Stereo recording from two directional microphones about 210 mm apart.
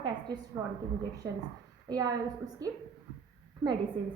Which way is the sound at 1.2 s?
10° right (ahead or behind).